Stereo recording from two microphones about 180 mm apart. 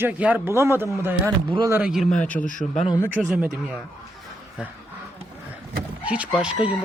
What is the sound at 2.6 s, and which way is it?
Speech, 30° left (ahead or behind).